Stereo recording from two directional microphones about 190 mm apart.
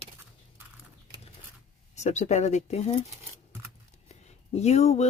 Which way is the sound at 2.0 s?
40° left (ahead or behind).